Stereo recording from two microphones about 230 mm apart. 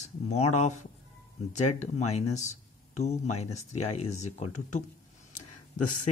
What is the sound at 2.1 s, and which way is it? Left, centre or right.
Speech, left.